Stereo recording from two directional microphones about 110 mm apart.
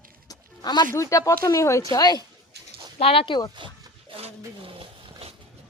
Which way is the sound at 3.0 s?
60° left (ahead or behind).